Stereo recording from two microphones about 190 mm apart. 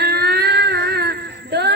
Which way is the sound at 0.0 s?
60° right (ahead or behind).